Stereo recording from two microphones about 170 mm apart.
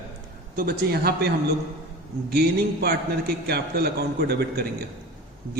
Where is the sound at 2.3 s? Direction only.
70° right (ahead or behind).